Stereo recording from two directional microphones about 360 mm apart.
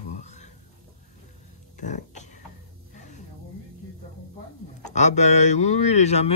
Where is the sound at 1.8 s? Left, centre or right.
Left.